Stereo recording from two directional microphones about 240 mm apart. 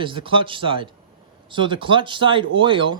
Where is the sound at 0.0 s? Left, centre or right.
Right.